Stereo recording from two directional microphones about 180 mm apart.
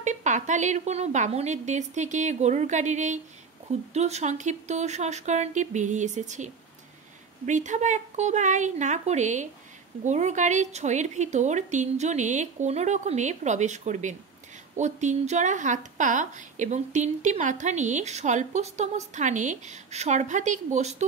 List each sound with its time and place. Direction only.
0.0 s a woman's voice: 40° right (ahead or behind)